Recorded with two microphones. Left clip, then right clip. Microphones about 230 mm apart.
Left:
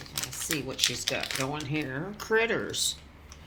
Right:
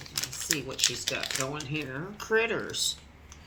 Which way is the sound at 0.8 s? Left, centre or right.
Centre.